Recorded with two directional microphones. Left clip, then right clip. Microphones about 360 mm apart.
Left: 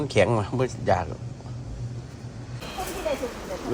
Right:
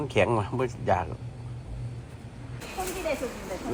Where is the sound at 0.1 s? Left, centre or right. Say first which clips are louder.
Left 3 dB; centre.